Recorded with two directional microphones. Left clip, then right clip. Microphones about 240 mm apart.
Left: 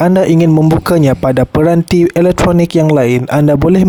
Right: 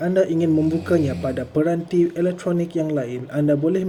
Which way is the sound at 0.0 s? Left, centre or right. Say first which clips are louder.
Left 9 dB; left.